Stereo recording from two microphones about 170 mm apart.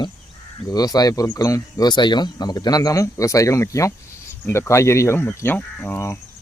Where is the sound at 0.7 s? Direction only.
20° left (ahead or behind).